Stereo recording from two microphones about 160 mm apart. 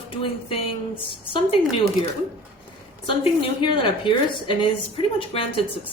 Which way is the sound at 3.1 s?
30° left (ahead or behind).